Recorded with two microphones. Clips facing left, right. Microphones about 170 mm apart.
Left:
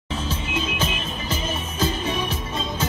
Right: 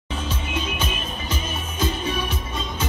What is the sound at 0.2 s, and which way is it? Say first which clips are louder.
Music: left 1 dB; 30° left (ahead or behind).